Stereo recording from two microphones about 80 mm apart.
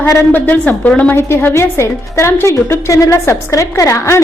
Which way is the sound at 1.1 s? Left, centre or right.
Left.